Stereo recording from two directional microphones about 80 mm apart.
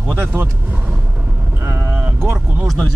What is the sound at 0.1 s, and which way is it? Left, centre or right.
Speech, right.